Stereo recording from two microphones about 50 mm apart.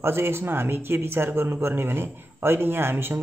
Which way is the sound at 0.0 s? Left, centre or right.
Right.